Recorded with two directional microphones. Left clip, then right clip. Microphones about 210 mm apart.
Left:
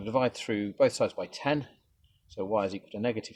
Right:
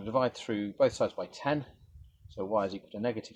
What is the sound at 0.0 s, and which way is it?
Speech, 25° left (ahead or behind).